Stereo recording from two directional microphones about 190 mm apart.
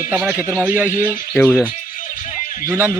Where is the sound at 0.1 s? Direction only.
10° right (ahead or behind).